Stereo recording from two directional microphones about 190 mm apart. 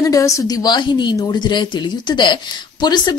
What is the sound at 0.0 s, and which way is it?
A woman's voice, 15° left (ahead or behind).